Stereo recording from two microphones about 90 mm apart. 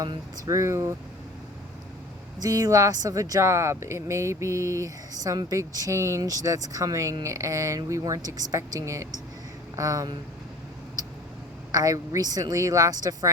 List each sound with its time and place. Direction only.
0.4 s speech: 35° right (ahead or behind)
2.4 s speech: 40° right (ahead or behind)
11.7 s speech: 40° right (ahead or behind)